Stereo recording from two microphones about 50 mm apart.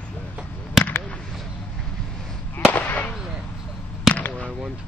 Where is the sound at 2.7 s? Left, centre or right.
Left.